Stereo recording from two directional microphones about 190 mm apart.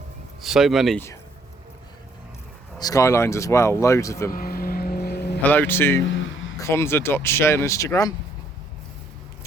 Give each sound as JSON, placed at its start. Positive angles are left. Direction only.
{"t": 0.4, "sound": "speech", "side_deg": 0}
{"t": 0.9, "sound": "speech", "side_deg": 15}
{"t": 2.7, "sound": "speech", "side_deg": 20}
{"t": 4.3, "sound": "vehicle", "side_deg": 50}
{"t": 5.4, "sound": "speech", "side_deg": 10}
{"t": 6.0, "sound": "a sound", "side_deg": 85}
{"t": 6.6, "sound": "speech", "side_deg": 15}